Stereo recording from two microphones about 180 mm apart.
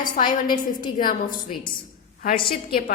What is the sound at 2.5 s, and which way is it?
Speech, 55° left (ahead or behind).